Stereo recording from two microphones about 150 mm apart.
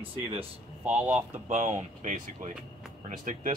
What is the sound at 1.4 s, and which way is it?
Speech, 50° right (ahead or behind).